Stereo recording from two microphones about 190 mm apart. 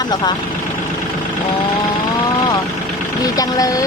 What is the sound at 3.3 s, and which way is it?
Speech, 20° left (ahead or behind).